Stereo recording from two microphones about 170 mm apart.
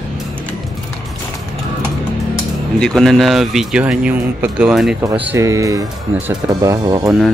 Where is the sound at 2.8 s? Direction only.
5° left (ahead or behind); by 7.2 s 20° right (ahead or behind).